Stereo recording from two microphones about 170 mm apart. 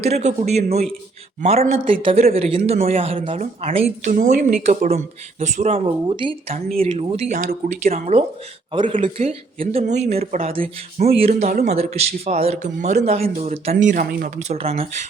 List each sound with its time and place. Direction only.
0.0 s speech: 40° right (ahead or behind)
4.1 s speech: 50° right (ahead or behind)
8.7 s speech: 30° right (ahead or behind)
10.6 s speech: 55° right (ahead or behind)
11.2 s speech: 40° right (ahead or behind); by 14.3 s 60° right (ahead or behind)
14.3 s speech: 40° right (ahead or behind)